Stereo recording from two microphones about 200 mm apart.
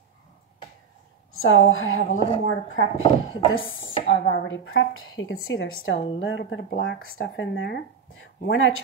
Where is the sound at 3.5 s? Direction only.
80° left.